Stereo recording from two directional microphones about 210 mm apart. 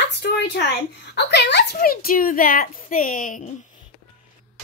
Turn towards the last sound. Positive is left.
turn(degrees=40)  # may be behind; listen again after turning